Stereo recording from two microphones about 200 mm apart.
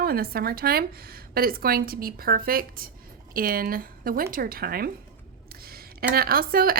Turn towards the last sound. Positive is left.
turn(degrees=-45)  # may be behind; listen again after turning